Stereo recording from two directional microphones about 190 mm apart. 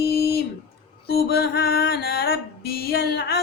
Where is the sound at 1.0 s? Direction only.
55° left (ahead or behind).